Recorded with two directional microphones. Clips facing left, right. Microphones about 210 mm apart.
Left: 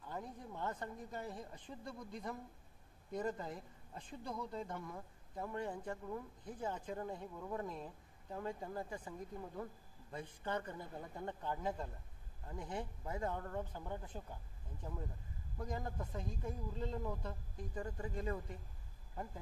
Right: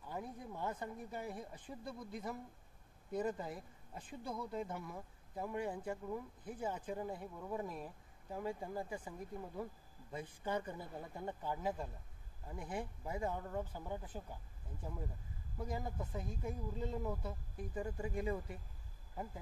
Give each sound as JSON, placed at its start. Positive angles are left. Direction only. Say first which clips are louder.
{"t": 0.0, "sound": "speech", "louder": "right 1 dB", "side_deg": -10}